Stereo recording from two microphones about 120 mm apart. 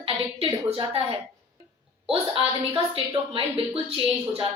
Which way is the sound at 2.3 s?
50° right (ahead or behind).